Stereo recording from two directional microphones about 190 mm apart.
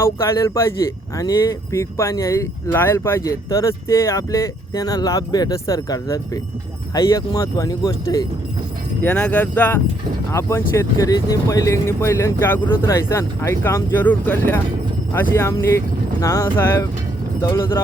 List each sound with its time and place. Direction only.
0.0 s speech: 15° left (ahead or behind)